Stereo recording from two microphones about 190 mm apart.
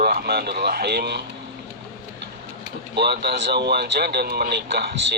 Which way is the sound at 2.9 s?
60° right (ahead or behind).